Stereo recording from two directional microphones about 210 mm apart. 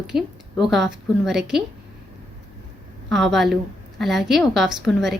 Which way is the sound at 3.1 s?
Centre (ahead or behind).